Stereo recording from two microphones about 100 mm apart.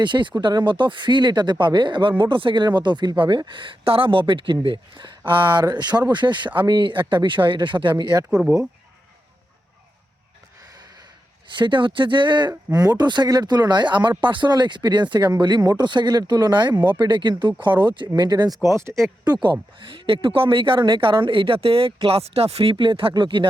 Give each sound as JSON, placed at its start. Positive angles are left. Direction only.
{"t": 0.0, "sound": "speech", "side_deg": -50}
{"t": 8.3, "sound": "speech", "side_deg": -10}
{"t": 11.5, "sound": "speech", "side_deg": -55}
{"t": 18.6, "sound": "speech", "side_deg": -30}
{"t": 19.2, "sound": "speech", "side_deg": -50}
{"t": 22.1, "sound": "speech", "side_deg": -90}